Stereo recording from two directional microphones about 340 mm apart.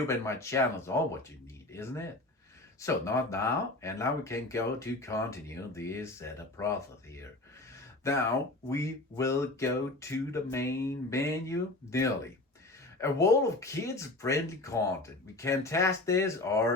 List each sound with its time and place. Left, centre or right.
0.1 s speech: centre
8.1 s speech: centre